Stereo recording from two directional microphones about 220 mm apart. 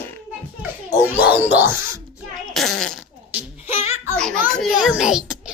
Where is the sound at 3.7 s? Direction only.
30° left (ahead or behind).